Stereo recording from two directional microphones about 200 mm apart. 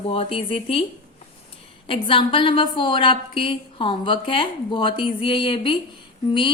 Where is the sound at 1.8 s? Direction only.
25° left (ahead or behind).